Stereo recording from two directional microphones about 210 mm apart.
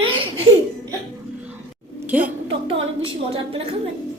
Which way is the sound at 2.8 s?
25° right (ahead or behind).